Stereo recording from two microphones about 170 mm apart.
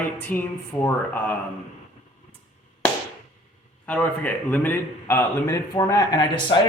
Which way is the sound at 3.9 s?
10° left (ahead or behind).